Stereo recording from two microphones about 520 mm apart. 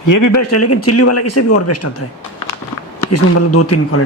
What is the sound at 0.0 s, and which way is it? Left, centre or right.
Speech, left.